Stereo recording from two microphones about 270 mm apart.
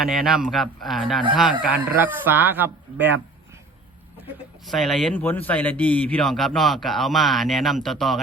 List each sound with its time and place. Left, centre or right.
0.0 s a man's voice: centre
4.6 s a man's voice: centre